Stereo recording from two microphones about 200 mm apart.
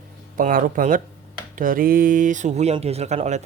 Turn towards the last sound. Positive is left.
turn(degrees=-35)  # may be behind; listen again after turning